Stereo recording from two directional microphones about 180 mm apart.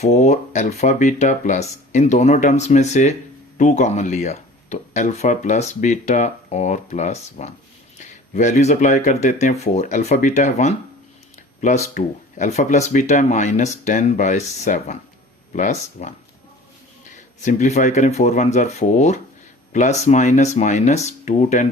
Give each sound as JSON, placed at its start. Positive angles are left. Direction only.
{"t": 0.0, "sound": "speech", "side_deg": 35}
{"t": 17.4, "sound": "speech", "side_deg": 40}